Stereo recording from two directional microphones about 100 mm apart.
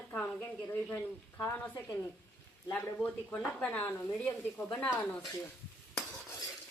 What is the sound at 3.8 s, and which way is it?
Speech, 25° left (ahead or behind).